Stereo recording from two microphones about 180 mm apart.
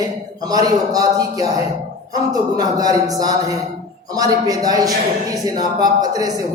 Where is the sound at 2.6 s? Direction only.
20° right (ahead or behind).